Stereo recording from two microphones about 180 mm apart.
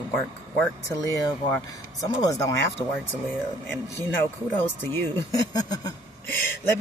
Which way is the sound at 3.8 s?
10° left (ahead or behind).